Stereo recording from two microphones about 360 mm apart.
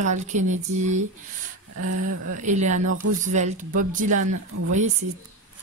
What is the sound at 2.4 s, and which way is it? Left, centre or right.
Speech, centre.